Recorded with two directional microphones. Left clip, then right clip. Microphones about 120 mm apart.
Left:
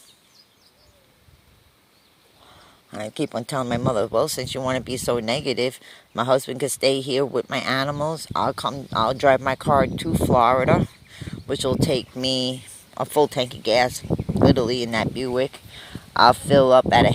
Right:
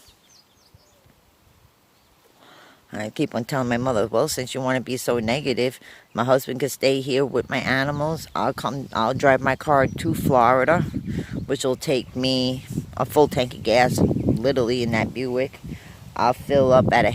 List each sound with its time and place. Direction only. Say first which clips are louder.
2.5 s speech: right 2 dB; 60° right (ahead or behind); by 15.5 s 25° right (ahead or behind)
15.8 s speech: left 6 dB; 5° right (ahead or behind)